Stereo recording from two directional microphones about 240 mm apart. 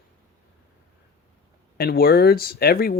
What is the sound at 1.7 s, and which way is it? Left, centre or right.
Speech, left.